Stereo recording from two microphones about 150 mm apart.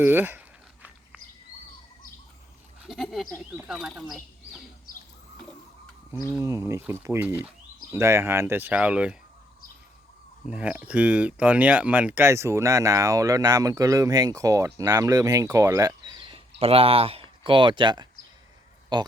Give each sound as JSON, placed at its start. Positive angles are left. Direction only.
{"t": 0.0, "sound": "a sound", "side_deg": -15}
{"t": 2.8, "sound": "speech", "side_deg": 0}
{"t": 6.4, "sound": "speech", "side_deg": -20}
{"t": 10.4, "sound": "speech", "side_deg": -10}